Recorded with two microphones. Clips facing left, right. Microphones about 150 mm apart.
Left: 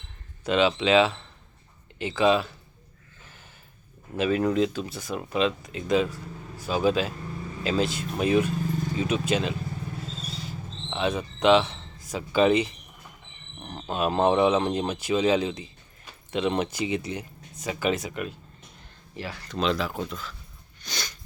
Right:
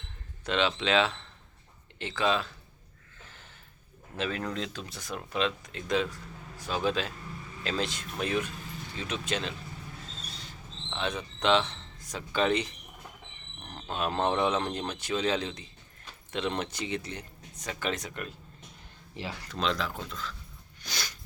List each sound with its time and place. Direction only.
0.4 s speech: 5° left (ahead or behind)
4.2 s speech: 10° left (ahead or behind)
10.2 s rodents: 10° left (ahead or behind)
10.9 s speech: 10° left (ahead or behind)
19.1 s speech: 20° right (ahead or behind)
19.5 s speech: 5° left (ahead or behind)
20.8 s a sound: 5° right (ahead or behind)